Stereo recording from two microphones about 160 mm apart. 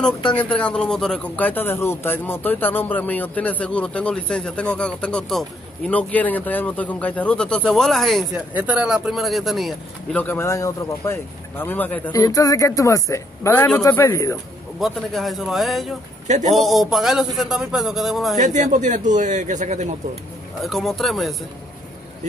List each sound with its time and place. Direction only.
0.4 s speech: 10° left (ahead or behind)
10.1 s speech: 10° left (ahead or behind)
12.1 s speech: 20° left (ahead or behind)
14.8 s speech: centre (ahead or behind)
16.3 s a man's voice: 45° right (ahead or behind)
16.5 s speech: centre (ahead or behind)
18.4 s a man's voice: 50° right (ahead or behind)
20.6 s speech: centre (ahead or behind)